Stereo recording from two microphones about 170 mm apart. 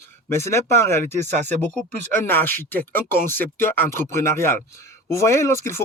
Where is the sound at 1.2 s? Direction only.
45° right (ahead or behind).